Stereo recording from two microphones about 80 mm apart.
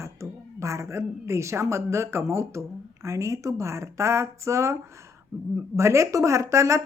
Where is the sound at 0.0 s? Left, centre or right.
Right.